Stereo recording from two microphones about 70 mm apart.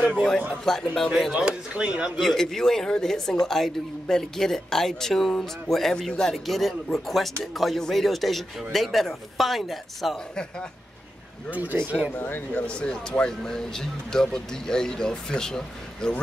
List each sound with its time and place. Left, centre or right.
0.7 s speech: centre
1.3 s speech: centre
2.1 s speech: centre
11.5 s speech: right
12.1 s speech: left
12.6 s speech: centre